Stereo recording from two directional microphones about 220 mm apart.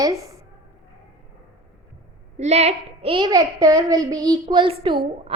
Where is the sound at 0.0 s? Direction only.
15° right (ahead or behind).